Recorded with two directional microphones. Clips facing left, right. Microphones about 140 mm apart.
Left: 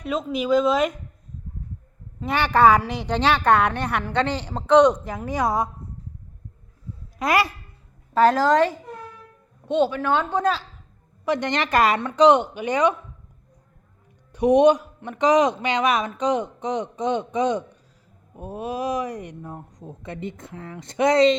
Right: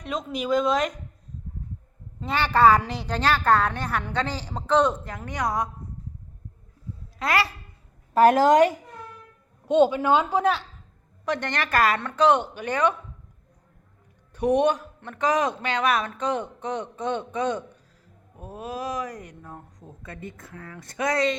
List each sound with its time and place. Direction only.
0.0 s speech: 5° left (ahead or behind)
2.2 s a man's voice: 15° left (ahead or behind)
3.2 s a woman's voice: centre (ahead or behind)
5.3 s speech: 25° left (ahead or behind)
7.2 s speech: 20° left (ahead or behind)
8.3 s a woman's voice: 20° right (ahead or behind)
11.3 s a man's voice: 15° left (ahead or behind)
14.3 s a man's voice: 15° left (ahead or behind)